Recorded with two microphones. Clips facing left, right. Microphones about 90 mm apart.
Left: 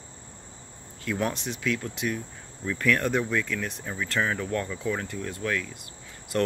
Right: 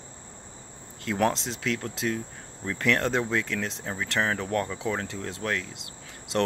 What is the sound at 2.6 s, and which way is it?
Speech, 30° right (ahead or behind).